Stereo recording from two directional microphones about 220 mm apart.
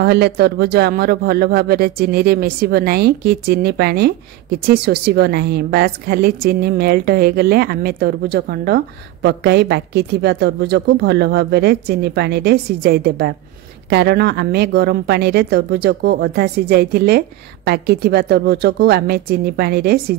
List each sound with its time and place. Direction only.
0.0 s speech: 50° right (ahead or behind)